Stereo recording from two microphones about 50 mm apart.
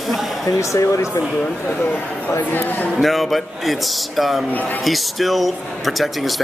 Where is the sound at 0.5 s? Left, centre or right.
Left.